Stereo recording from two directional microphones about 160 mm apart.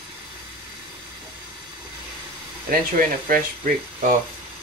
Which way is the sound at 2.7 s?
65° right (ahead or behind).